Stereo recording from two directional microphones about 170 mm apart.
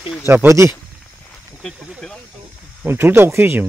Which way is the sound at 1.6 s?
5° left (ahead or behind).